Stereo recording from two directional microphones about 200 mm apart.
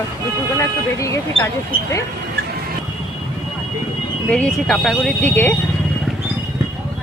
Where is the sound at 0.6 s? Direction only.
15° left (ahead or behind).